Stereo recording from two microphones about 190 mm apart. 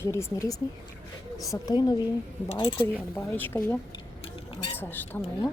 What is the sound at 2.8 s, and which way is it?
Speech, 10° left (ahead or behind).